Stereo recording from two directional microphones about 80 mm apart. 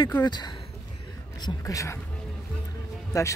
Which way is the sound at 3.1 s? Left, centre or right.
Left.